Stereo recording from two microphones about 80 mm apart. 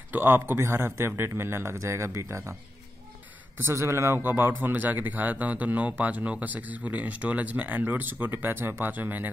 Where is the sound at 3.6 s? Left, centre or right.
Right.